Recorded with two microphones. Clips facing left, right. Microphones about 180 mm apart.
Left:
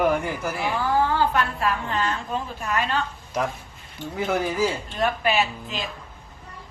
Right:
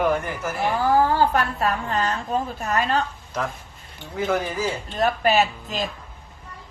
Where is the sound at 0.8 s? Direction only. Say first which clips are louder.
Right 3 dB; 40° right (ahead or behind).